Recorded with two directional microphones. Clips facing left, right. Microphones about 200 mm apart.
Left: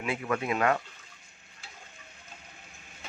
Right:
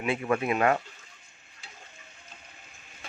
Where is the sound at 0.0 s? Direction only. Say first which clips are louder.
Right 3 dB; 25° right (ahead or behind).